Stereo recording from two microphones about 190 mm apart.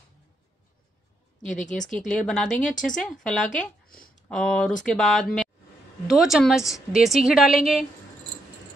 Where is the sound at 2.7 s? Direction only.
40° left (ahead or behind).